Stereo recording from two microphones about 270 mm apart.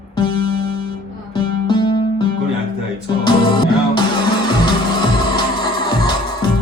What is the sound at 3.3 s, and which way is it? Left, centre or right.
Music, centre.